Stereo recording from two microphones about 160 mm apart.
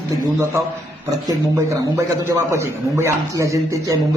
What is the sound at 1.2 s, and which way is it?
A man's voice, 20° right (ahead or behind).